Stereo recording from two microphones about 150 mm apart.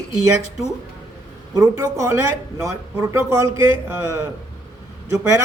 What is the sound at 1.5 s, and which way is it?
A man's voice, 20° right (ahead or behind).